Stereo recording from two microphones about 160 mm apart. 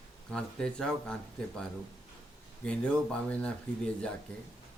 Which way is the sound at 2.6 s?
5° left (ahead or behind).